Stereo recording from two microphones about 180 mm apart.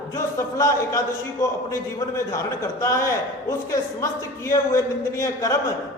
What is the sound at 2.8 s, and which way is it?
A man's voice, 15° left (ahead or behind).